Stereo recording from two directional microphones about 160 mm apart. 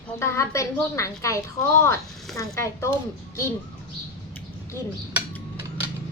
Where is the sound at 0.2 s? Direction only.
15° left (ahead or behind).